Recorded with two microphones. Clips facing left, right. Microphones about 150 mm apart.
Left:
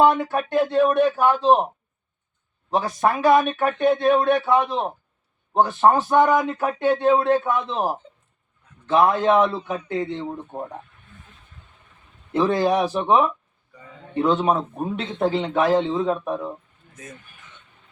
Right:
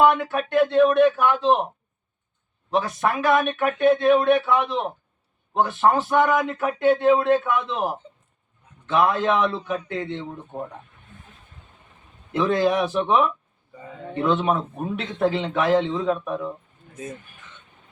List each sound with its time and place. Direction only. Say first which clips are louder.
0.5 s speech: right 2 dB; 30° left (ahead or behind)
2.6 s speech: left 2 dB; 30° left (ahead or behind)
12.3 s speech: left 1 dB; 30° left (ahead or behind)